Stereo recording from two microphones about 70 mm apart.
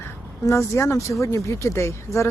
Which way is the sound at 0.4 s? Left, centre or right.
Left.